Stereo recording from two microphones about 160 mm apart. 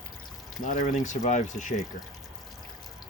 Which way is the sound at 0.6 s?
55° left (ahead or behind).